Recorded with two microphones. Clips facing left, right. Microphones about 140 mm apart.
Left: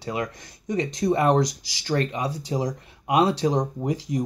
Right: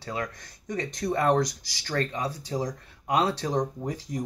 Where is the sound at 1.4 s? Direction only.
90° left.